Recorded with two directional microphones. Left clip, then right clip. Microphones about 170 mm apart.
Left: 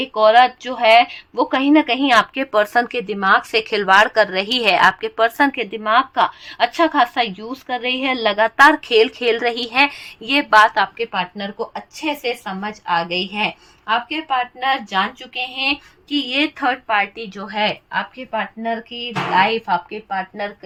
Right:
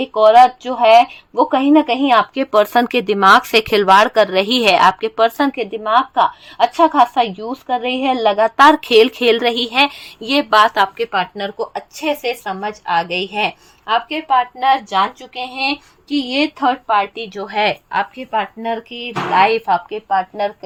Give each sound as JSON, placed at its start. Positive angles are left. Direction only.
{"t": 0.0, "sound": "a woman's voice", "side_deg": -5}
{"t": 2.3, "sound": "a woman's voice", "side_deg": -20}
{"t": 2.9, "sound": "a woman's voice", "side_deg": -40}
{"t": 3.8, "sound": "speech", "side_deg": -25}
{"t": 8.4, "sound": "a woman's voice", "side_deg": -20}
{"t": 10.9, "sound": "a woman's voice", "side_deg": -50}
{"t": 17.3, "sound": "speech", "side_deg": -45}
{"t": 18.2, "sound": "speech", "side_deg": -75}